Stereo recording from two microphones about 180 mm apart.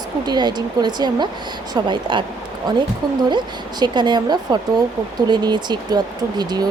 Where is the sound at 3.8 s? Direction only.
25° right (ahead or behind).